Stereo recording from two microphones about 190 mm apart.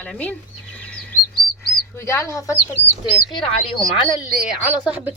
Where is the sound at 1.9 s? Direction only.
15° left (ahead or behind).